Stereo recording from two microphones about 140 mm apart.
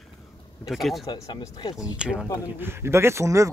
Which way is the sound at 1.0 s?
25° left (ahead or behind).